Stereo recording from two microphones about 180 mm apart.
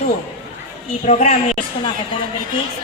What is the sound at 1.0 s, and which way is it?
Speech, 40° left (ahead or behind).